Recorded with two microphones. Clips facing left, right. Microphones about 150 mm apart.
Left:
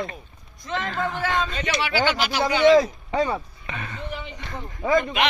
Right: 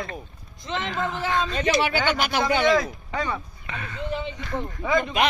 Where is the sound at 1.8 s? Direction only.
50° right (ahead or behind).